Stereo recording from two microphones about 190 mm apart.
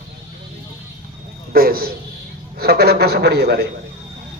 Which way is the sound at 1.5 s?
50° right (ahead or behind).